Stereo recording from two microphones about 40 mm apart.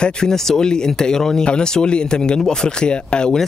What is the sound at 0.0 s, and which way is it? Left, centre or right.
Speech, centre.